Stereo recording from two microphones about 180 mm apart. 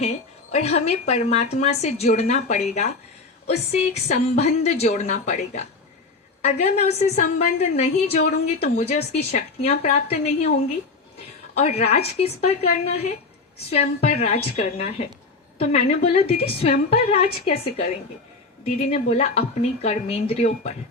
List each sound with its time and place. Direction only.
0.5 s a woman's voice: 35° left (ahead or behind)
11.5 s a woman's voice: 35° left (ahead or behind)